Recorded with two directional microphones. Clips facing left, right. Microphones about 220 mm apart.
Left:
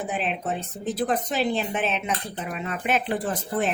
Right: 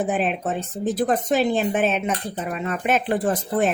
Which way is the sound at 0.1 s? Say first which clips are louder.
Right 5 dB; 50° right (ahead or behind).